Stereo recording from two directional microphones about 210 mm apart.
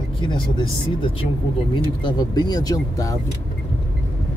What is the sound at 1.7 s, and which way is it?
Speech, 20° left (ahead or behind).